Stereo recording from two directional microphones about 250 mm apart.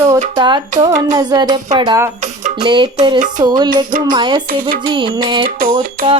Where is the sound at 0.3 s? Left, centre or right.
Centre.